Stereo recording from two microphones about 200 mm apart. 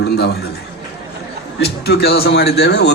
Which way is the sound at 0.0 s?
55° left (ahead or behind).